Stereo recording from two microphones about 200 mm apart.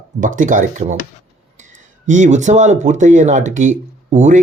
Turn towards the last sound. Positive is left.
turn(degrees=-35)  # may be behind; listen again after turning